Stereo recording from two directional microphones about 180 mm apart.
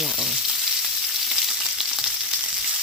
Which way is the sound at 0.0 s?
Centre (ahead or behind).